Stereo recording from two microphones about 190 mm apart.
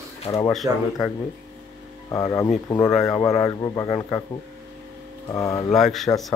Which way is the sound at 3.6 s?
20° left (ahead or behind).